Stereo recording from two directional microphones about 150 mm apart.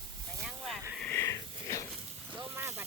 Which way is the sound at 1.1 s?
20° left (ahead or behind).